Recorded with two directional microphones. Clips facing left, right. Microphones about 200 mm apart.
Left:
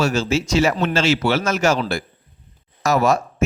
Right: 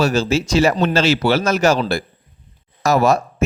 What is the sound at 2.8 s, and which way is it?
Speech, 35° right (ahead or behind).